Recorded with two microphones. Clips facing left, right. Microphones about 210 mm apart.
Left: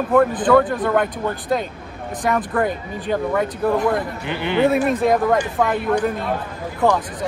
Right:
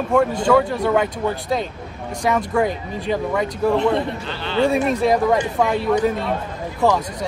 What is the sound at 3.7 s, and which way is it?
Speech, 25° right (ahead or behind).